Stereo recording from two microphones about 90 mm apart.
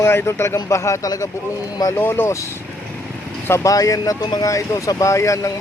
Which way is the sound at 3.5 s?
40° left (ahead or behind).